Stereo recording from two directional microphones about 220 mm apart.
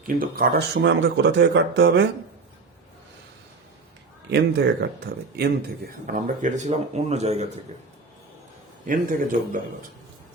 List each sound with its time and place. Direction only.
0.1 s speech: 40° right (ahead or behind)
4.3 s speech: 50° right (ahead or behind); by 7.4 s 30° right (ahead or behind)
8.9 s speech: 40° right (ahead or behind)